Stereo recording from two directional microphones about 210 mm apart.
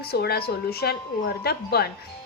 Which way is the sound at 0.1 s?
50° left (ahead or behind).